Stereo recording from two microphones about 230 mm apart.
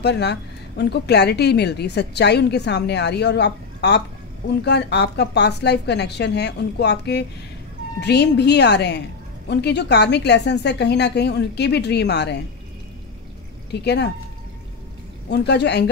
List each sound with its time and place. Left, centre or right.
0.0 s a woman's voice: left
13.7 s a woman's voice: left
15.2 s a woman's voice: left